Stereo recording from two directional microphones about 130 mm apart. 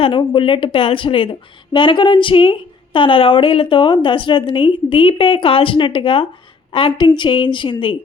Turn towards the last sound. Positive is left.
turn(degrees=40)  # may be behind; listen again after turning